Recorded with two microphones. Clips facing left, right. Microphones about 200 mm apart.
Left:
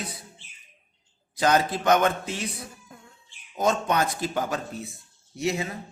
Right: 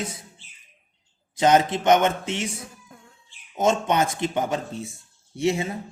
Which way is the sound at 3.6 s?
25° right (ahead or behind).